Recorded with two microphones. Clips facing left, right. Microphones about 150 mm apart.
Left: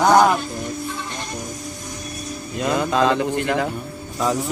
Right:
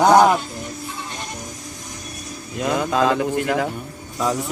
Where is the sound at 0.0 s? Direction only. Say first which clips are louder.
Right 1 dB; 15° right (ahead or behind).